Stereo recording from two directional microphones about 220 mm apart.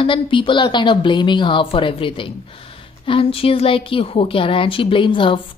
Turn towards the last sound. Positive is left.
turn(degrees=25)  # may be behind; listen again after turning